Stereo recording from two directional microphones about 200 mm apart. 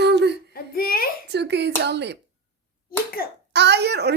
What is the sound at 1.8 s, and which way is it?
Speech, 60° right (ahead or behind).